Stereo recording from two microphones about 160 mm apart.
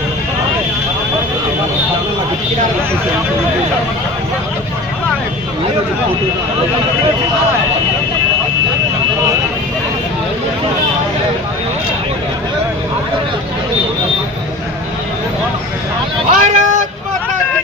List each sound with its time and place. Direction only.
16.3 s speech: 50° right (ahead or behind)